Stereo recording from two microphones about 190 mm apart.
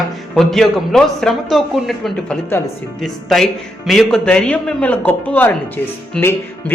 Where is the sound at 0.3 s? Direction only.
Centre (ahead or behind).